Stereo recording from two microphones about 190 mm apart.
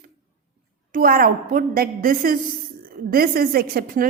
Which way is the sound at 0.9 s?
50° right (ahead or behind).